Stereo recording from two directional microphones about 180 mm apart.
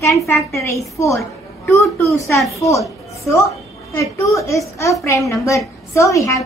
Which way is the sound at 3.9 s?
15° left (ahead or behind).